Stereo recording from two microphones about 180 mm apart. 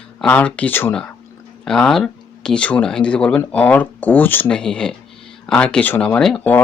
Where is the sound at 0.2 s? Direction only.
5° left (ahead or behind).